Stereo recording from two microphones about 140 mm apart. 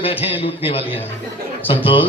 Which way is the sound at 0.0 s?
40° left (ahead or behind).